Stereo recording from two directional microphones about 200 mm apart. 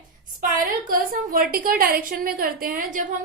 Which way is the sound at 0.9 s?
45° right (ahead or behind).